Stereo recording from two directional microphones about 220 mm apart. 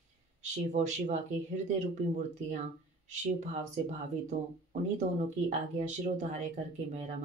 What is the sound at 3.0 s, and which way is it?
Speech, 30° right (ahead or behind).